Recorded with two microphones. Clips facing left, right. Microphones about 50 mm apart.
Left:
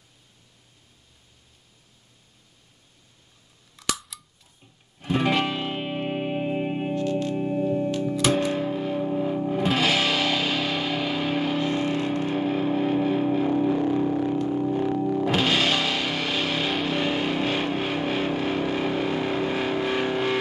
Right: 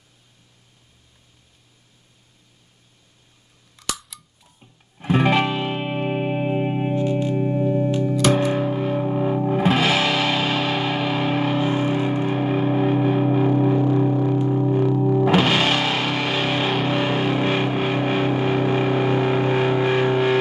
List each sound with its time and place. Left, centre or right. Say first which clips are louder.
3.7 s cap gun: left 1 dB; centre
4.6 s music: right 7 dB; right; by 8.2 s centre
8.5 s music: right 4 dB; right
10.3 s music: right 4 dB; right
14.5 s music: right 4 dB; right